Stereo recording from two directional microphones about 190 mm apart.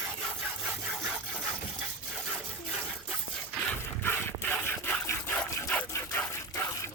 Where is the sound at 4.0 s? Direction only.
10° left (ahead or behind).